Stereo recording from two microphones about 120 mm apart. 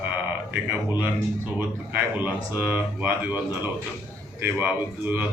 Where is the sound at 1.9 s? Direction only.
15° right (ahead or behind).